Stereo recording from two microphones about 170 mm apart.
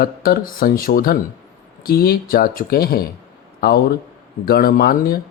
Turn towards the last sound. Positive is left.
turn(degrees=60)  # may be behind; listen again after turning